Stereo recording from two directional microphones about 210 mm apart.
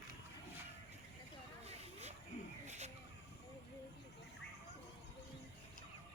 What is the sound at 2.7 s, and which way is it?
Snake, 35° right (ahead or behind).